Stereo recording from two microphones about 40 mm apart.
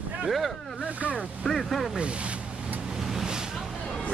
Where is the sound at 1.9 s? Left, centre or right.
Right.